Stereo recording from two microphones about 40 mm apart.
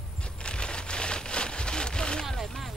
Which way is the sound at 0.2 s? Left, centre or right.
Left.